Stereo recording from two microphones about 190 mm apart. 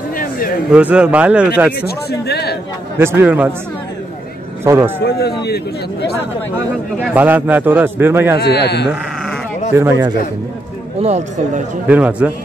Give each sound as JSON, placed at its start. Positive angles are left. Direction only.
{"t": 0.7, "sound": "a man's voice", "side_deg": -5}
{"t": 1.9, "sound": "speech", "side_deg": 60}
{"t": 3.0, "sound": "a man's voice", "side_deg": -10}
{"t": 4.6, "sound": "a man's voice", "side_deg": -15}
{"t": 5.4, "sound": "speech", "side_deg": 60}
{"t": 7.2, "sound": "a man's voice", "side_deg": -10}
{"t": 8.4, "sound": "speech", "side_deg": 60}
{"t": 9.8, "sound": "a man's voice", "side_deg": -15}
{"t": 11.0, "sound": "speech", "side_deg": -35}
{"t": 11.9, "sound": "a man's voice", "side_deg": -5}